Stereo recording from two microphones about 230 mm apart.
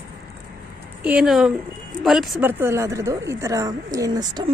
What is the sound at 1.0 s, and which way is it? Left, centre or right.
Speech, centre.